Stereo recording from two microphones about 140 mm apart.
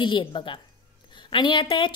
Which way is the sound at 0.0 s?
35° left (ahead or behind).